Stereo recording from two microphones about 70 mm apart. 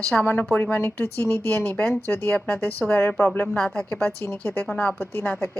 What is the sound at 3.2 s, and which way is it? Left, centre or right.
Speech, centre.